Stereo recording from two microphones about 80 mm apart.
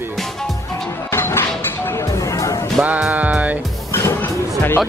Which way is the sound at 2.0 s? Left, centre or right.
Left.